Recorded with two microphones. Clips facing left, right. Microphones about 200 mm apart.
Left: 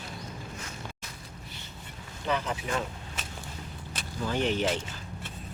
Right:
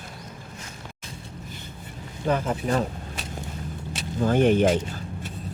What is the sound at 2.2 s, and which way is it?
Speech, 45° right (ahead or behind).